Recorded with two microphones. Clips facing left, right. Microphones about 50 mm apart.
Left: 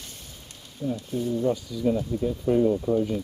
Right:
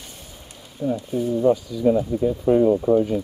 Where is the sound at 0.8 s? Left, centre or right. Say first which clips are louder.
Right 5 dB; centre.